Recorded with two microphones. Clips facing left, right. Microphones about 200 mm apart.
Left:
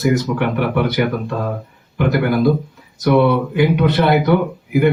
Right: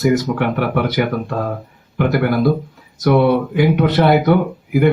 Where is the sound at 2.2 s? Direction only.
50° right (ahead or behind).